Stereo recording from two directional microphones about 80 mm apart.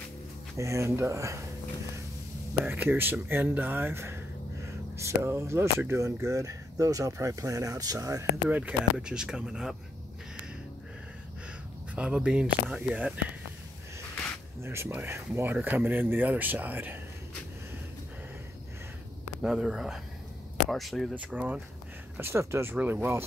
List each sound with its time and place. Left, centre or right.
0.6 s speech: right
2.6 s speech: right
8.5 s speech: centre
8.9 s speech: centre
11.9 s speech: centre
14.6 s speech: right
19.4 s speech: centre
21.1 s speech: centre
22.2 s speech: right